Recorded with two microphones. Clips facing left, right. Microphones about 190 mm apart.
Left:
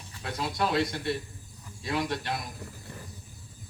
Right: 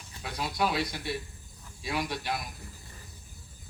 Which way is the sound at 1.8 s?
5° right (ahead or behind).